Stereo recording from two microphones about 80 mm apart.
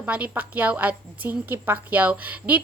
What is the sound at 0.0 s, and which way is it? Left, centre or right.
A woman's voice, centre.